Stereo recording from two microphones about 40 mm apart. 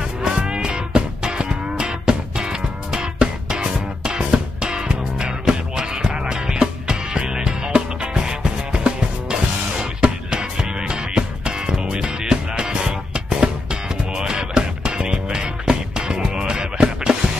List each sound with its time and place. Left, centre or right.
0.5 s music: centre